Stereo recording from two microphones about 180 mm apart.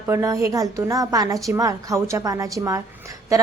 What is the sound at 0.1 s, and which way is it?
A woman's voice, 15° right (ahead or behind).